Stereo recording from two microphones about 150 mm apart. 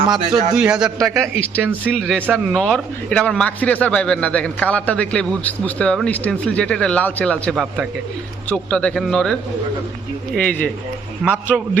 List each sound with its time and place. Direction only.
0.5 s a man's voice: 5° right (ahead or behind)
0.9 s speech: 20° right (ahead or behind)
1.9 s a man's voice: 5° left (ahead or behind)
2.2 s speech: 10° right (ahead or behind)
2.6 s a man's voice: 5° left (ahead or behind)
7.5 s speech: 5° right (ahead or behind)
8.4 s a man's voice: 5° left (ahead or behind)